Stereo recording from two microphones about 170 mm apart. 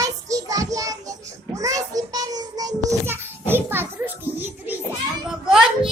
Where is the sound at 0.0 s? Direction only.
20° right (ahead or behind).